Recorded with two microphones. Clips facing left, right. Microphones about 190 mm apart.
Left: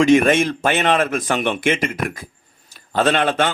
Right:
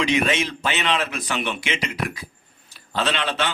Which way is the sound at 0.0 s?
50° left (ahead or behind).